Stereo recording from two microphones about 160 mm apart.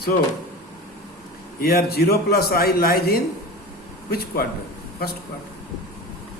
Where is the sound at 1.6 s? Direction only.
75° left (ahead or behind).